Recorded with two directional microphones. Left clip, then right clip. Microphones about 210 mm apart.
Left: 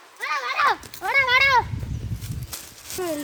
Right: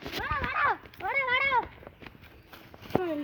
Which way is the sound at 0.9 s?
Centre (ahead or behind).